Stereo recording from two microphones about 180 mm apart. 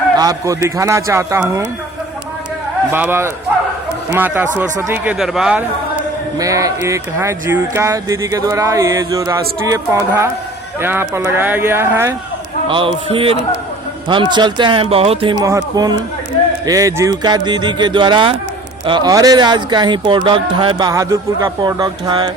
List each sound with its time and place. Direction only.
0.2 s speech: 20° right (ahead or behind)
2.9 s speech: 10° right (ahead or behind)
4.5 s speech: 10° right (ahead or behind)
6.3 s speech: 20° right (ahead or behind)
12.6 s a man's voice: 30° right (ahead or behind)
15.4 s speech: 20° right (ahead or behind)